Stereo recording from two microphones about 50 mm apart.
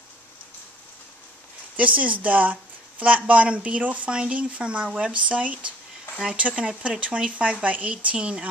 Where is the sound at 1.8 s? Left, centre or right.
Right.